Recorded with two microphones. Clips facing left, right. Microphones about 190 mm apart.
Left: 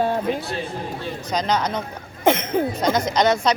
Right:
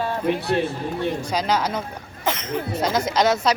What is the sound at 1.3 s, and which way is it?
Speech, 5° right (ahead or behind).